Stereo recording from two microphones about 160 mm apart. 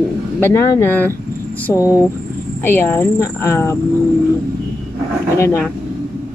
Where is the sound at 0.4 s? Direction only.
15° left (ahead or behind).